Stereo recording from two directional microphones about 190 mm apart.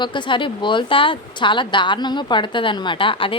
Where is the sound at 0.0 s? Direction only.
25° left (ahead or behind).